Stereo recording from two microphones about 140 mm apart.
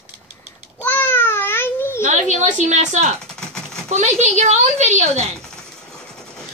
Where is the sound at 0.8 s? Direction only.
15° left (ahead or behind).